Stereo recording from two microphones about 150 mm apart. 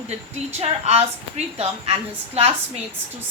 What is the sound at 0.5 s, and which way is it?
A woman's voice, 45° right (ahead or behind).